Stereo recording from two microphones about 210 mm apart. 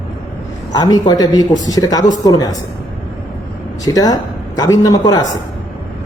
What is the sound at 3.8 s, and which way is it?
Speech, 15° left (ahead or behind).